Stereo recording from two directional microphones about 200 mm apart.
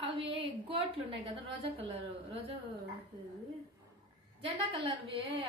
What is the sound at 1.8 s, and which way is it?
Speech, 30° right (ahead or behind).